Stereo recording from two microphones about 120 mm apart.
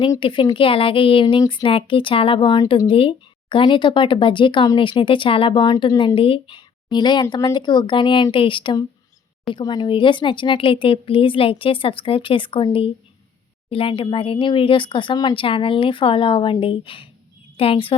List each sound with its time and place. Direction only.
0.2 s speech: 45° left (ahead or behind)
6.0 s a woman's voice: 45° left (ahead or behind)